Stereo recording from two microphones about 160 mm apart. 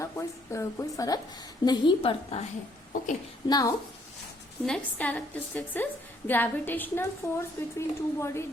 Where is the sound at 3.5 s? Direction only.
25° left (ahead or behind).